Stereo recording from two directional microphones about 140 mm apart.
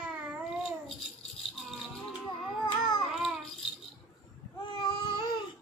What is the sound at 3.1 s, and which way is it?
Rattle, 5° right (ahead or behind).